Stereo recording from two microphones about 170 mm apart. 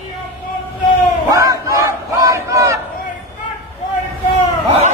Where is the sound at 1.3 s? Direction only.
20° right (ahead or behind).